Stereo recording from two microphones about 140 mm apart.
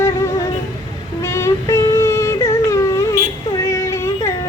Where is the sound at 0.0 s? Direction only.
20° left (ahead or behind).